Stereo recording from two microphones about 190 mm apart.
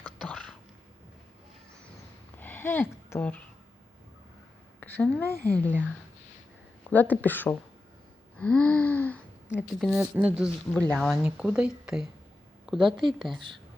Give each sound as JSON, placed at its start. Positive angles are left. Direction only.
{"t": 0.0, "sound": "a sound", "side_deg": 5}
{"t": 2.4, "sound": "a sound", "side_deg": 10}
{"t": 4.8, "sound": "a woman's voice", "side_deg": 10}
{"t": 6.9, "sound": "gasp", "side_deg": 10}
{"t": 9.6, "sound": "a woman's voice", "side_deg": 0}
{"t": 10.8, "sound": "a woman's voice", "side_deg": 5}
{"t": 12.8, "sound": "a woman's voice", "side_deg": -25}
{"t": 13.1, "sound": "a woman's voice", "side_deg": 0}